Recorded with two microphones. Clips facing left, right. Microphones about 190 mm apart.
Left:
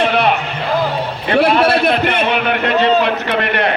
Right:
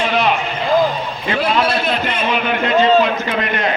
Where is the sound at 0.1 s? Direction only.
60° left (ahead or behind).